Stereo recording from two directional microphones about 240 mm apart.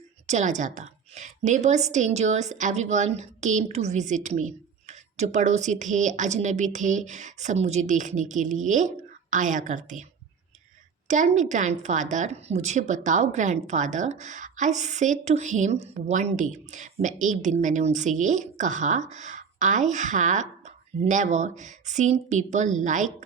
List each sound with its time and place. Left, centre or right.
0.3 s a woman's voice: right
11.1 s speech: right